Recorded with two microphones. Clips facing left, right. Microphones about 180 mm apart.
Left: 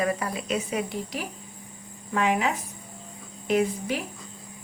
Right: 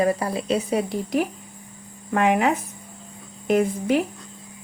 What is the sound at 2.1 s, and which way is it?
A woman's voice, 55° right (ahead or behind).